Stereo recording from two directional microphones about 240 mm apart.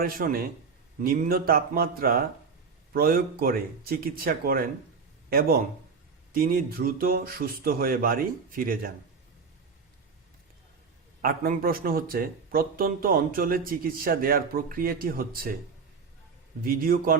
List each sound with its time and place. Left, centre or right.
0.0 s speech: right
11.2 s speech: right
16.6 s speech: right